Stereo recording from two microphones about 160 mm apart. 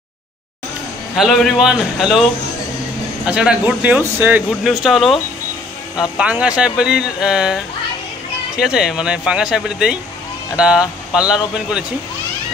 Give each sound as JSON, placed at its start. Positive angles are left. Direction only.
{"t": 1.1, "sound": "speech", "side_deg": 0}
{"t": 3.3, "sound": "speech", "side_deg": -5}
{"t": 4.6, "sound": "speech", "side_deg": 0}